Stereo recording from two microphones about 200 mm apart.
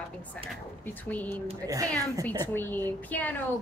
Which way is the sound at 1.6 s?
15° right (ahead or behind).